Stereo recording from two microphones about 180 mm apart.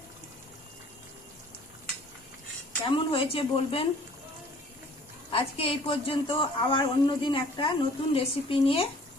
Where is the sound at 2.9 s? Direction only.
30° left (ahead or behind).